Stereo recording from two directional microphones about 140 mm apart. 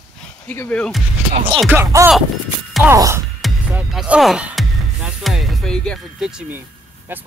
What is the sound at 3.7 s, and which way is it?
Music, 10° right (ahead or behind).